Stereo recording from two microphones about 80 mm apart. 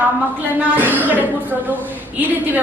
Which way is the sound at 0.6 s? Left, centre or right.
Right.